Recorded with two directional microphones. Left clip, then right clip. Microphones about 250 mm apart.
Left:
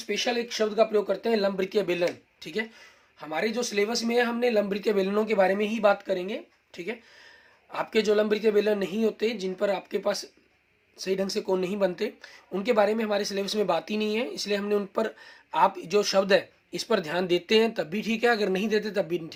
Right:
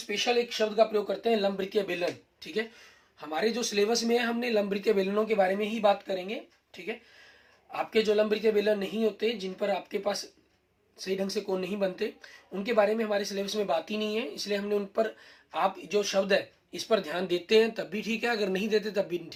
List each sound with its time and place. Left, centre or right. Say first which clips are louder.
0.1 s speech: even; left
7.7 s speech: left 2 dB; left